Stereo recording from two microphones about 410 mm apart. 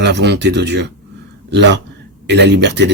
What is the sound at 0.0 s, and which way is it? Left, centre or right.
Speech, right.